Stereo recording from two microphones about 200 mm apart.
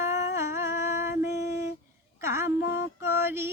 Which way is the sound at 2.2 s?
15° right (ahead or behind).